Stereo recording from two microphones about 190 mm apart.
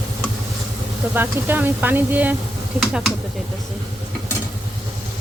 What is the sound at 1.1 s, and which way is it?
Stir, 10° right (ahead or behind).